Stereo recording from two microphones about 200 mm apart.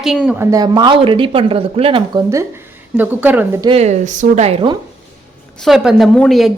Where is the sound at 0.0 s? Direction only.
5° right (ahead or behind).